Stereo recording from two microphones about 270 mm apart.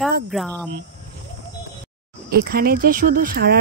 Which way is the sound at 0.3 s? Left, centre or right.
Centre.